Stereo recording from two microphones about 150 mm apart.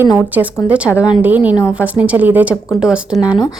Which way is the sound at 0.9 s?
20° left (ahead or behind).